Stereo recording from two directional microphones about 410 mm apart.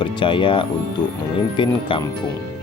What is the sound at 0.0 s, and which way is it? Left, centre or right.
Speech, centre.